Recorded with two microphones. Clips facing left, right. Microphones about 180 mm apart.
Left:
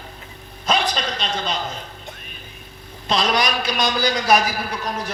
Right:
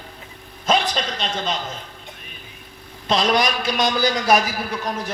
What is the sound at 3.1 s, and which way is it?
A man's voice, 45° right (ahead or behind).